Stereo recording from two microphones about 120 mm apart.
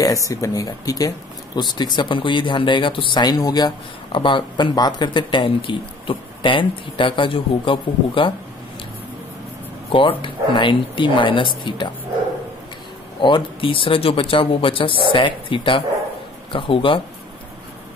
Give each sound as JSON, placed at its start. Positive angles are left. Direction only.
{"t": 0.0, "sound": "speech", "side_deg": 30}
{"t": 9.8, "sound": "speech", "side_deg": 45}
{"t": 13.2, "sound": "speech", "side_deg": 45}